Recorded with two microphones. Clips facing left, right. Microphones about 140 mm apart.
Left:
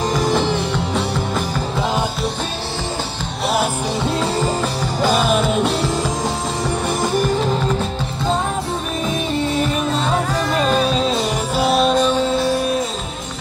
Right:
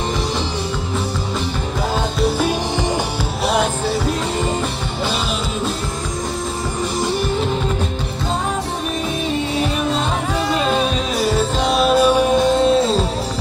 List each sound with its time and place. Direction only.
5.0 s music: 45° left (ahead or behind)
11.1 s music: 15° left (ahead or behind)
11.6 s music: centre (ahead or behind); by 12.7 s 20° right (ahead or behind)